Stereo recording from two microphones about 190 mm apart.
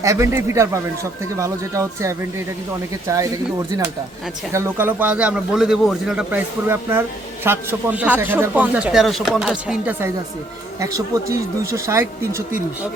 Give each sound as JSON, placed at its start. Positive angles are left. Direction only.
{"t": 0.0, "sound": "speech", "side_deg": -15}
{"t": 10.8, "sound": "speech", "side_deg": -15}